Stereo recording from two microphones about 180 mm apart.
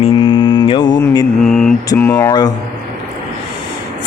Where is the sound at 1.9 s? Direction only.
15° left (ahead or behind).